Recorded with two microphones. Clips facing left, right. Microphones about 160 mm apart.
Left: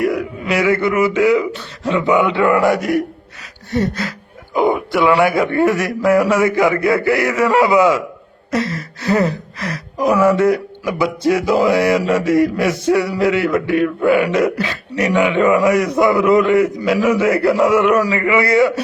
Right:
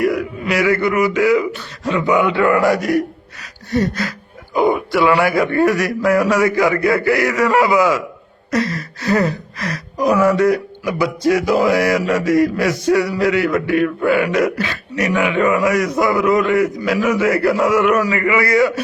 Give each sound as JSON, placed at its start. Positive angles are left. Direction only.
{"t": 0.0, "sound": "speech", "side_deg": 25}